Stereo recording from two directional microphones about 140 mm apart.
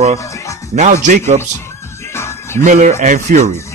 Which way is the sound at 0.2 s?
20° left (ahead or behind).